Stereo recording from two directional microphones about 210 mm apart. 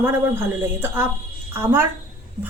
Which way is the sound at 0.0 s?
10° right (ahead or behind).